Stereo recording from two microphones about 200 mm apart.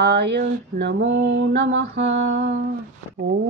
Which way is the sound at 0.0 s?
55° right (ahead or behind).